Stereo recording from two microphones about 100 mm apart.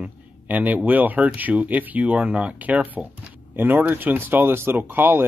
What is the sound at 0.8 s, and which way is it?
Speech, 15° right (ahead or behind).